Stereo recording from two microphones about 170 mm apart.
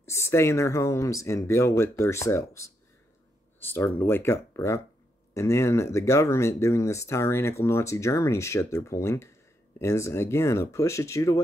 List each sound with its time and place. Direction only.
0.0 s speech: 15° left (ahead or behind)